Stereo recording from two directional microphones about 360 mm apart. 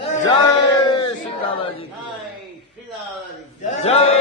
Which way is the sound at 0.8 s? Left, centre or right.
Centre.